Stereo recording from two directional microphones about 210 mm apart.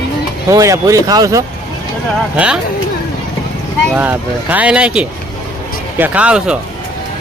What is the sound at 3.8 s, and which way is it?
Speech, 5° right (ahead or behind).